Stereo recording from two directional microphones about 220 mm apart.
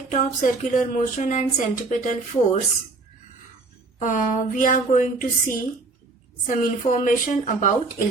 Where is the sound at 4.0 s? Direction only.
35° left (ahead or behind).